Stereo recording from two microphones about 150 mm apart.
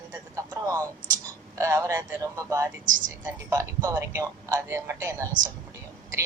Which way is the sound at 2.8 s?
60° right (ahead or behind).